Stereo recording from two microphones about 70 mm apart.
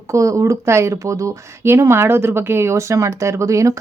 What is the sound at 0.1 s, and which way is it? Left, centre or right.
Speech, right.